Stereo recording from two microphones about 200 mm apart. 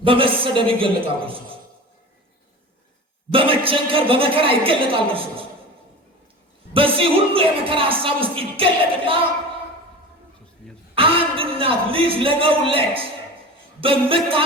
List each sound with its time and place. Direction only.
0.0 s speech: 25° right (ahead or behind)
3.3 s speech: 25° right (ahead or behind)
6.7 s speech: 25° right (ahead or behind)
10.9 s speech: 25° right (ahead or behind)